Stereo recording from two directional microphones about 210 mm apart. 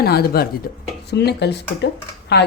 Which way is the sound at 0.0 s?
50° left (ahead or behind).